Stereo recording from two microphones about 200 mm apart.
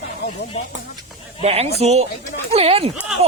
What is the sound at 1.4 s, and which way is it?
Speech, 30° right (ahead or behind).